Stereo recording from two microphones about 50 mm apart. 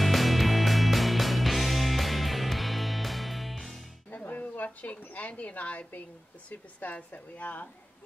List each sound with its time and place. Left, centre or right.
0.0 s music: centre
4.1 s music: left
4.6 s a woman's voice: left